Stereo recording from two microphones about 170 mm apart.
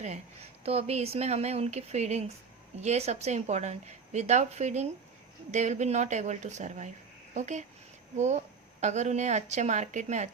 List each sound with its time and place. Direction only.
0.6 s a woman's voice: 35° right (ahead or behind)